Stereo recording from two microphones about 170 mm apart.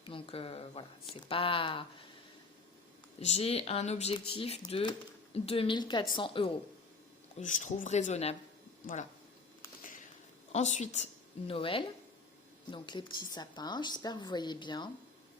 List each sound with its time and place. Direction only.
0.0 s speech: 30° left (ahead or behind)
3.2 s speech: 40° left (ahead or behind)
7.3 s speech: 45° left (ahead or behind)
10.5 s a woman's voice: 45° left (ahead or behind); by 14.8 s 25° left (ahead or behind)